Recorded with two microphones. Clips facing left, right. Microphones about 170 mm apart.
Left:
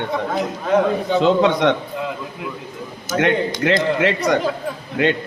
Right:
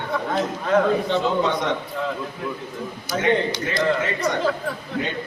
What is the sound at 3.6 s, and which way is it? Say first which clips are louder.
Speech: left 9 dB; 80° left.